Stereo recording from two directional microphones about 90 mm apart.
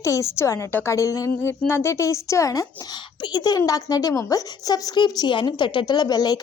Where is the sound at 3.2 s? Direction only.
50° left (ahead or behind).